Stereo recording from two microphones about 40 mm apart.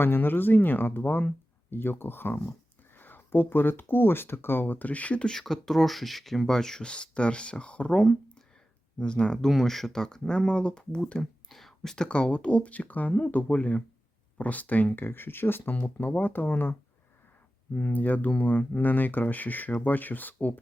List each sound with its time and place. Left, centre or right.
0.0 s speech: left
4.6 s speech: left
5.2 s speech: centre
5.6 s speech: centre
6.6 s speech: centre
9.5 s speech: centre
11.4 s whispering: centre
12.0 s speech: left
15.0 s speech: left
16.0 s speech: left
17.7 s speech: left